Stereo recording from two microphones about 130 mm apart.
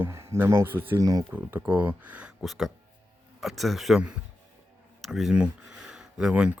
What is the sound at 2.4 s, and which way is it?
Speech, centre (ahead or behind).